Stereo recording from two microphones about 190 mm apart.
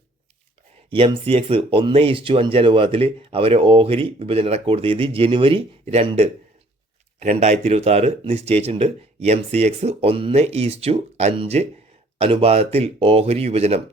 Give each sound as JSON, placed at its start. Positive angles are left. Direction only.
{"t": 0.9, "sound": "speech", "side_deg": -30}